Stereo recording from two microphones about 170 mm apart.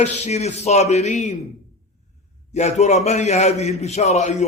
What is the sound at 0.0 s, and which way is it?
A man's voice, 40° left (ahead or behind).